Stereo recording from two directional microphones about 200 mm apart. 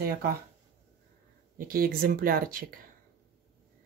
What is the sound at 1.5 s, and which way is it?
Speech, 45° right (ahead or behind).